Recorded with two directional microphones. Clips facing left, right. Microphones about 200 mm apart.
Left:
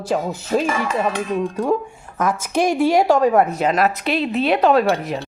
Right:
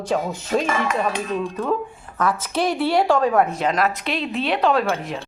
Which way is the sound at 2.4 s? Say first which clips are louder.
Left 4 dB; 45° left (ahead or behind).